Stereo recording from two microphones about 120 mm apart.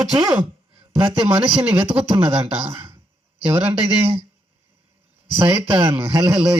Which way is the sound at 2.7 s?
20° right (ahead or behind).